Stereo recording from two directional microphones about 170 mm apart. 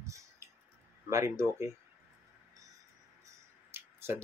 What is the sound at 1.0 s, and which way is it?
Speech, 15° right (ahead or behind).